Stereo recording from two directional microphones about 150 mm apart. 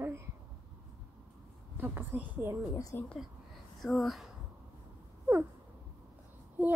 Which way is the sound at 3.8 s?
Centre (ahead or behind).